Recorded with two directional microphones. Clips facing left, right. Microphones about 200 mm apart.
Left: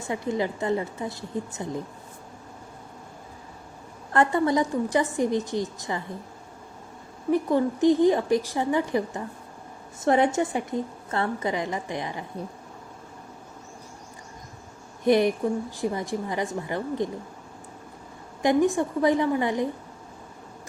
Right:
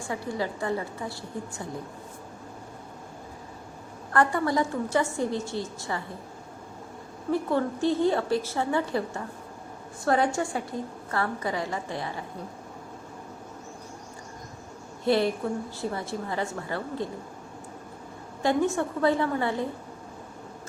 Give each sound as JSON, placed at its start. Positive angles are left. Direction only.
{"t": 0.0, "sound": "a woman's voice", "side_deg": 20}
{"t": 4.1, "sound": "a woman's voice", "side_deg": 20}
{"t": 7.3, "sound": "a woman's voice", "side_deg": 15}
{"t": 15.0, "sound": "a woman's voice", "side_deg": 15}
{"t": 18.4, "sound": "a woman's voice", "side_deg": 15}